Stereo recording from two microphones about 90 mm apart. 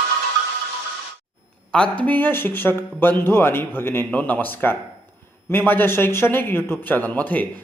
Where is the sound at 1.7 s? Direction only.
15° left (ahead or behind).